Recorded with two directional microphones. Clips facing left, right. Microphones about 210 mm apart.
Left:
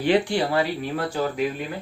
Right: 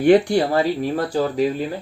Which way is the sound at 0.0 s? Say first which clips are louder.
Right 6 dB; 45° right (ahead or behind).